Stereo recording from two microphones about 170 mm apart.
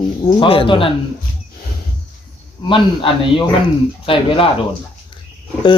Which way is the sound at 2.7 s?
30° left (ahead or behind).